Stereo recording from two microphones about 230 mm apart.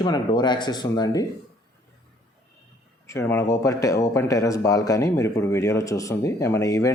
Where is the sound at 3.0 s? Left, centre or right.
Centre.